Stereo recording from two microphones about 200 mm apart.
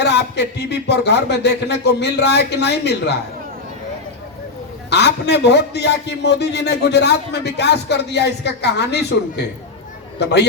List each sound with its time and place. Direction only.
0.0 s a man's voice: 55° left (ahead or behind)
4.9 s a man's voice: 60° left (ahead or behind)